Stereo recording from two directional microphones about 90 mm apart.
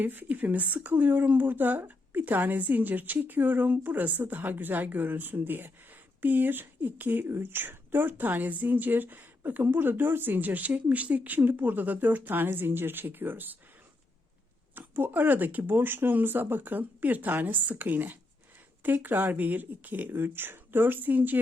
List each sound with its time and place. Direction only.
0.0 s speech: 20° right (ahead or behind)
14.8 s speech: 20° right (ahead or behind)